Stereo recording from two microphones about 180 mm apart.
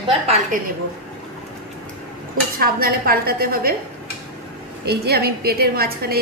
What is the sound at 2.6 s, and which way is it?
Speech, 55° right (ahead or behind).